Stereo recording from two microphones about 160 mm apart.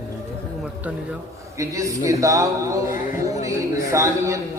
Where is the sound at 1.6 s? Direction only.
20° right (ahead or behind).